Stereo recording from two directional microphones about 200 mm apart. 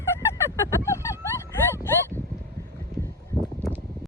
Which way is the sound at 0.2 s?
15° left (ahead or behind).